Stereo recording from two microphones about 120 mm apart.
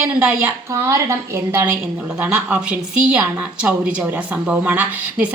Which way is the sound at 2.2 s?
10° right (ahead or behind).